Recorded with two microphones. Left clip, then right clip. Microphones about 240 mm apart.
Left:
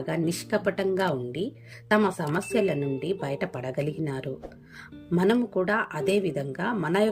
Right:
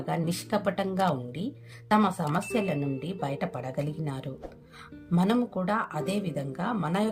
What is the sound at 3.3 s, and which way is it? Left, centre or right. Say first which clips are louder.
Speech: left 2 dB; centre.